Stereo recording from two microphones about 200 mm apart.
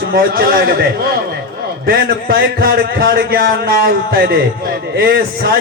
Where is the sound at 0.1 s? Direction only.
50° right (ahead or behind).